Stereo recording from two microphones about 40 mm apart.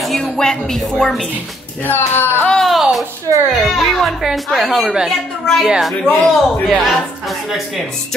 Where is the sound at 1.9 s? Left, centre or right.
Left.